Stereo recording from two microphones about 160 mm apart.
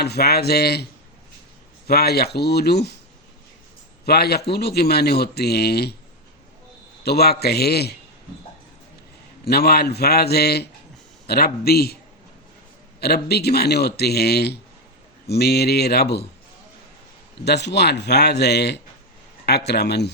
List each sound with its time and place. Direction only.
0.0 s a man's voice: 85° left
1.9 s a man's voice: 80° left
4.0 s a man's voice: 80° left
7.0 s a man's voice: 85° left
9.4 s a man's voice: 75° left (ahead or behind)
11.3 s a man's voice: 75° left (ahead or behind)
13.0 s a man's voice: 85° left
17.4 s a man's voice: 90° left